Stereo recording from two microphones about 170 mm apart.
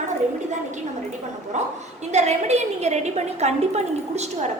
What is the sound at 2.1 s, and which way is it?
A woman's voice, 40° right (ahead or behind).